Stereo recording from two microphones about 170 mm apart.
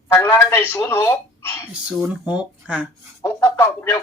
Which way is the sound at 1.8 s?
5° right (ahead or behind).